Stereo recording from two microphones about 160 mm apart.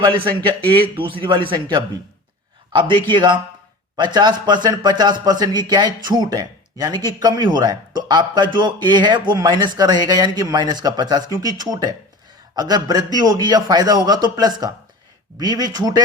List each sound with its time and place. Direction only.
0.0 s a man's voice: 30° right (ahead or behind)
2.7 s a man's voice: 30° right (ahead or behind)